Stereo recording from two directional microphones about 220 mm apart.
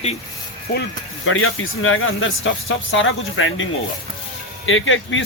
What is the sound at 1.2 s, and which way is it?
Speech, 65° left (ahead or behind).